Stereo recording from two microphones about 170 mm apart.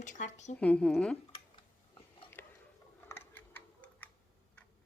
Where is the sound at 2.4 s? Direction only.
10° left (ahead or behind).